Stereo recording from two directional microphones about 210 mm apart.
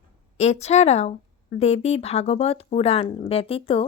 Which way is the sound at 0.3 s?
30° left (ahead or behind).